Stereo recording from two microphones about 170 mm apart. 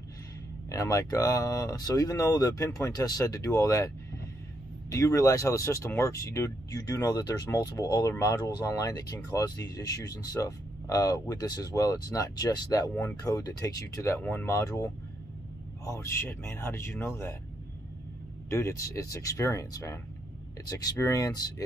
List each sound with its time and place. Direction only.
0.7 s speech: 20° left (ahead or behind)
4.9 s speech: 20° left (ahead or behind)
18.5 s speech: 15° left (ahead or behind)